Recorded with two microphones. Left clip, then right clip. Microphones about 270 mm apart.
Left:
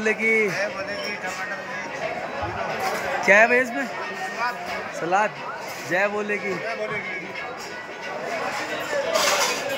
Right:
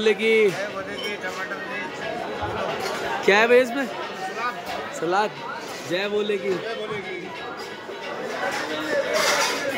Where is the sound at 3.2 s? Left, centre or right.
Centre.